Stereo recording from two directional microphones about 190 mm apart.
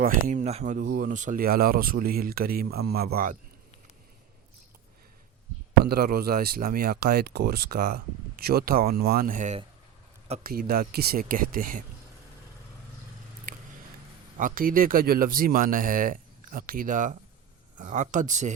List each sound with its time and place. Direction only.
0.0 s speech: 40° right (ahead or behind)
5.8 s speech: 55° right (ahead or behind)
14.3 s speech: 45° right (ahead or behind)